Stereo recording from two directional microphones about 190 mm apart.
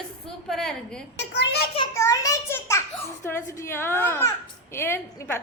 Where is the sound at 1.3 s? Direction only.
65° left (ahead or behind).